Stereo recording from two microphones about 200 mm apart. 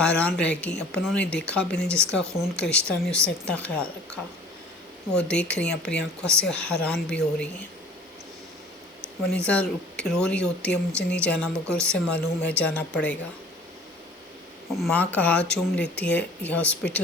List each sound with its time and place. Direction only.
0.0 s speech: 5° left (ahead or behind)
5.1 s speech: 5° left (ahead or behind)
9.5 s speech: 5° left (ahead or behind)
14.7 s speech: centre (ahead or behind)